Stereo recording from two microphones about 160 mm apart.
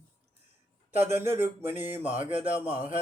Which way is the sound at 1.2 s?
15° right (ahead or behind).